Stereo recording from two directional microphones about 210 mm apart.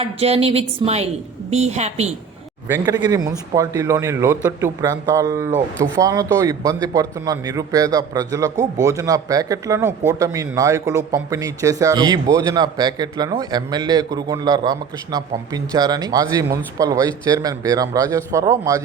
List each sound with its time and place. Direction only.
0.0 s a man's voice: 30° right (ahead or behind)
2.6 s a man's voice: 15° right (ahead or behind)